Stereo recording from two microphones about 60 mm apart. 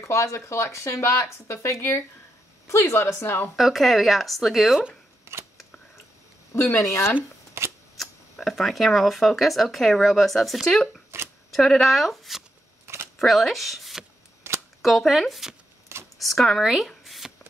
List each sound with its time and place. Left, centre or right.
0.0 s speech: left
3.2 s speech: left
3.5 s speech: centre
5.3 s camera: right
6.5 s speech: left
7.6 s a sound: right
8.0 s speech: centre
12.8 s a sound: right
13.2 s speech: centre
14.5 s a sound: right
14.8 s speech: centre